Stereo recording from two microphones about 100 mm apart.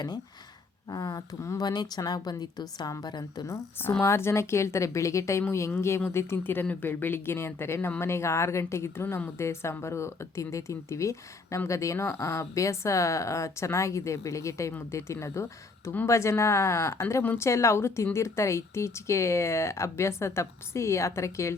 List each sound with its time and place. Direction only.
0.9 s speech: 40° left (ahead or behind)
1.6 s a woman's voice: 45° left (ahead or behind)
4.0 s a woman's voice: 30° left (ahead or behind)
14.7 s a woman's voice: 20° left (ahead or behind)
14.9 s a woman's voice: 30° left (ahead or behind)